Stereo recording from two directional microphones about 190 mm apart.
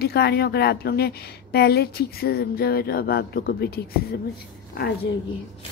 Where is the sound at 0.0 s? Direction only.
60° left (ahead or behind).